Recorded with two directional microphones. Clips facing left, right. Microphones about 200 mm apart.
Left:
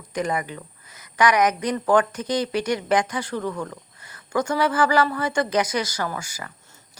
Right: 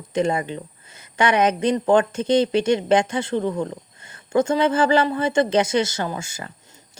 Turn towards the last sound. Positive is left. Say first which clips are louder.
# right 2 dB
turn(degrees=-25)  # may be behind; listen again after turning